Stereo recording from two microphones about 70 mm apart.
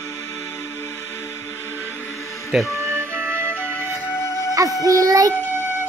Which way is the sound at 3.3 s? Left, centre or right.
Left.